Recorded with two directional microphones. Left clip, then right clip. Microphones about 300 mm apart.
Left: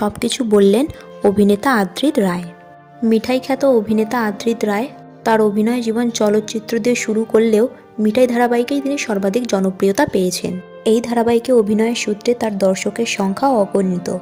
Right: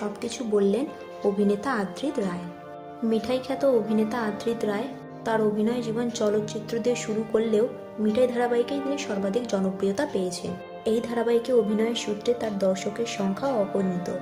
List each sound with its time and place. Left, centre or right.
0.0 s a woman's voice: left